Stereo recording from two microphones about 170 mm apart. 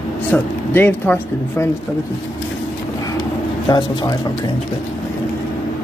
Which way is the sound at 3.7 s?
25° left (ahead or behind).